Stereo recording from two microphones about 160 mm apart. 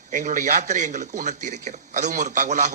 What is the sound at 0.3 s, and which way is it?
A man's voice, 50° right (ahead or behind).